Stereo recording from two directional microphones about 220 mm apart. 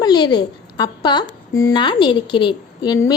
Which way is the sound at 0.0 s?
20° left (ahead or behind).